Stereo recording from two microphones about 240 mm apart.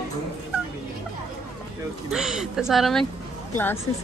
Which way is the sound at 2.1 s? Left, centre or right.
Centre.